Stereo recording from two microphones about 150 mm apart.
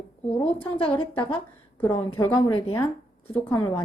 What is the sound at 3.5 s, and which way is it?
Speech, 30° left (ahead or behind).